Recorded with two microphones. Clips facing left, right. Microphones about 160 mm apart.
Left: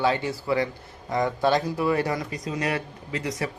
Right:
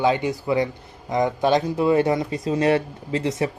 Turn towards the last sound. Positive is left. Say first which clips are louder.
# right 6 dB
turn(degrees=-25)  # may be behind; listen again after turning